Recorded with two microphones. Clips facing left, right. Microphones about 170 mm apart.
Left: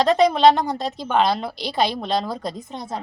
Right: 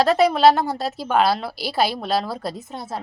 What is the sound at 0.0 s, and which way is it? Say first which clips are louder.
Speech: even; 5° right (ahead or behind).